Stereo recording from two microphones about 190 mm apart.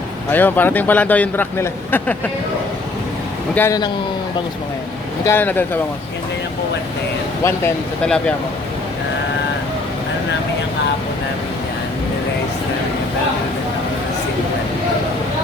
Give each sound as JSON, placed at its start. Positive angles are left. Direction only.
{"t": 0.3, "sound": "speech", "side_deg": 10}
{"t": 3.5, "sound": "speech", "side_deg": 15}
{"t": 5.2, "sound": "speech", "side_deg": 10}
{"t": 7.4, "sound": "speech", "side_deg": 10}